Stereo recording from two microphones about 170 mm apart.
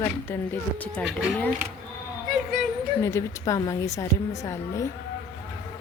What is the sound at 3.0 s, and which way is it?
A woman's voice, 20° left (ahead or behind).